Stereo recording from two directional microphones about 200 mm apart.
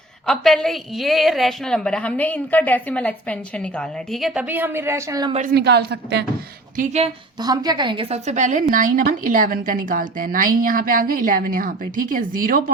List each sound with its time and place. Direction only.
0.3 s a woman's voice: centre (ahead or behind); by 5.3 s 15° right (ahead or behind)
5.5 s a woman's voice: 55° right (ahead or behind)
6.7 s speech: 35° right (ahead or behind)
7.3 s a woman's voice: 20° right (ahead or behind); by 12.7 s 45° right (ahead or behind)